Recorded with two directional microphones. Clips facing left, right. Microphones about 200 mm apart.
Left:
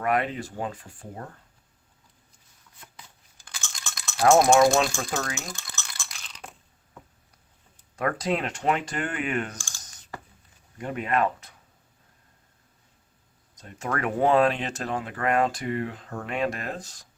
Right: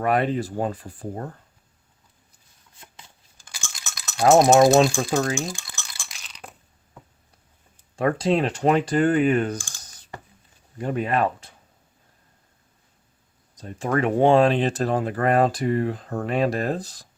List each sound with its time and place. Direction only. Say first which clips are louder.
0.0 s speech: right 4 dB; 35° right (ahead or behind)
2.8 s a sound: right 1 dB; 25° right (ahead or behind)
3.4 s a sound: even; 10° right (ahead or behind)
4.4 s speech: right 6 dB; 20° right (ahead or behind)
5.5 s rattle: right 5 dB; 10° right (ahead or behind)
6.1 s crunch: right 1 dB; centre (ahead or behind)
7.9 s speech: right 6 dB; 30° right (ahead or behind)
9.6 s speech: right 7 dB; 55° right (ahead or behind)
10.8 s speech: right 3 dB; 30° right (ahead or behind)
13.6 s speech: right 6 dB; 30° right (ahead or behind)